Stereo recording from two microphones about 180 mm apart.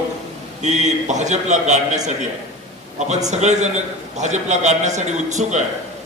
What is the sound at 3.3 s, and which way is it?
A man's voice, 40° right (ahead or behind).